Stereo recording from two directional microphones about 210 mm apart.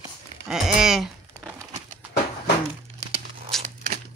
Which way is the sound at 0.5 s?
Centre (ahead or behind).